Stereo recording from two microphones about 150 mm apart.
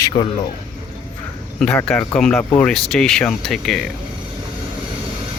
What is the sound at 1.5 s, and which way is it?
Speech, 5° left (ahead or behind).